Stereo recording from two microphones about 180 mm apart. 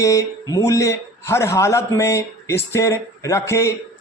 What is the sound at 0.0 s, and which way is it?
Speech, 20° left (ahead or behind).